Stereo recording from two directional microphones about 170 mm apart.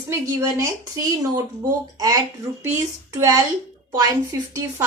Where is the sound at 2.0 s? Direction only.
20° right (ahead or behind).